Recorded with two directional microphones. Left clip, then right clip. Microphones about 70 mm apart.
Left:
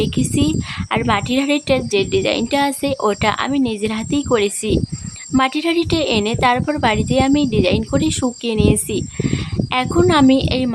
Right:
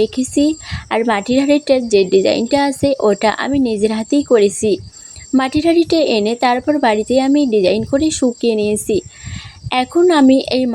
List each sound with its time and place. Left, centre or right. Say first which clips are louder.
0.0 s a woman's voice: right 4 dB; right
6.6 s speech: right 5 dB; centre
6.8 s a woman's voice: right 2 dB; right